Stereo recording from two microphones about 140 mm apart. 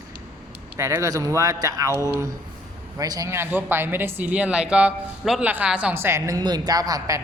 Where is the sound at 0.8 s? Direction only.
20° right (ahead or behind).